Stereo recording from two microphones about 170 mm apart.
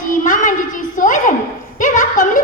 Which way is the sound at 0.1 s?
50° left (ahead or behind).